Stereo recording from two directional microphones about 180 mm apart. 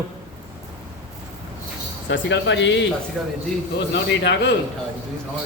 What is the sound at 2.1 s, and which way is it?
Speech, 80° left.